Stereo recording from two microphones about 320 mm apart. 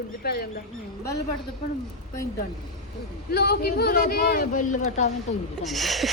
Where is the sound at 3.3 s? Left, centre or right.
Left.